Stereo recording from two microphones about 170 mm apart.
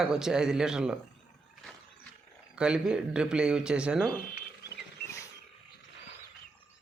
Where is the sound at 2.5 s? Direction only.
5° right (ahead or behind).